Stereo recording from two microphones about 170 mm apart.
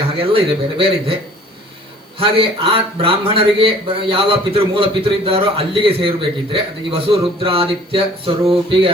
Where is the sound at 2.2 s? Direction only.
30° right (ahead or behind).